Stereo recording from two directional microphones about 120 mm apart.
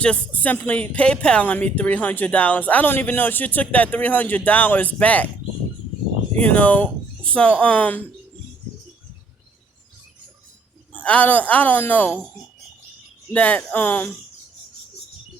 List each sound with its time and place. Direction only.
0.0 s speech: 10° left (ahead or behind)
6.4 s speech: 10° left (ahead or behind)
10.9 s speech: 10° left (ahead or behind)
13.3 s speech: 15° left (ahead or behind)